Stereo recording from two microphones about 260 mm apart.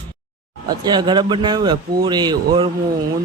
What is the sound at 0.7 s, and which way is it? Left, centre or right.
A man's voice, centre.